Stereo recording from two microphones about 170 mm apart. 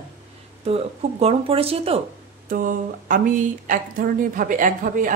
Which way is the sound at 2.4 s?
50° right (ahead or behind).